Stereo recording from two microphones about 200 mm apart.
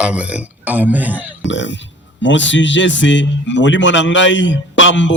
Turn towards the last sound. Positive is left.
turn(degrees=70)  # may be behind; listen again after turning